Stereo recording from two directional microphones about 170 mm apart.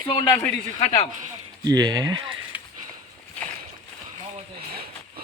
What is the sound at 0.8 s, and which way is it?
Speech, 45° left (ahead or behind).